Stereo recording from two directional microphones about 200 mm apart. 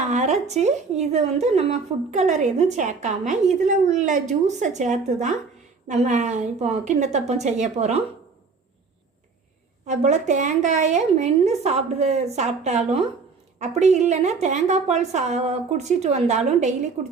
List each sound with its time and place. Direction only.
0.1 s a woman's voice: 35° right (ahead or behind)
9.8 s a woman's voice: 35° right (ahead or behind)